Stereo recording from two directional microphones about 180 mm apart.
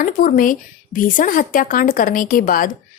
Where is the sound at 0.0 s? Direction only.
50° left (ahead or behind).